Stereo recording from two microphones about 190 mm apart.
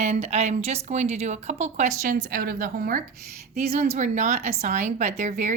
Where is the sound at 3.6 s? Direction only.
35° right (ahead or behind).